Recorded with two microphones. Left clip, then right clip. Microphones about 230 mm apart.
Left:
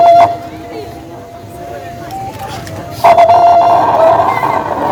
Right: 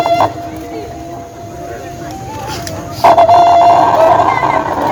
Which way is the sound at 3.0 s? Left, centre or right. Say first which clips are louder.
Left 1 dB; right.